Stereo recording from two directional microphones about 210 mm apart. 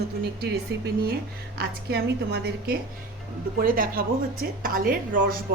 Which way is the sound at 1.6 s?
50° right (ahead or behind).